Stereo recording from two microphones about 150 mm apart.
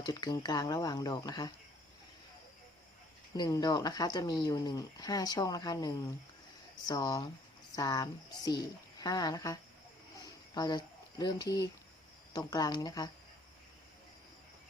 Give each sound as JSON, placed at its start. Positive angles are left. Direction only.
{"t": 0.0, "sound": "speech", "side_deg": 25}
{"t": 3.3, "sound": "speech", "side_deg": 25}